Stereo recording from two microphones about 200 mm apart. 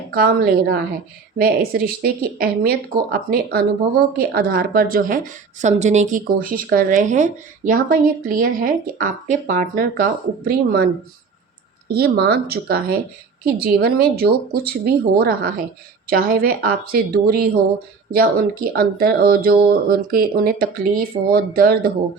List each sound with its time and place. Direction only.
0.1 s speech: 50° right (ahead or behind)
11.9 s speech: 50° right (ahead or behind)